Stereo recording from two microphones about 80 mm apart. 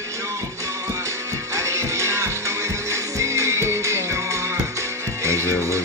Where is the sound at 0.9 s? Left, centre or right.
Right.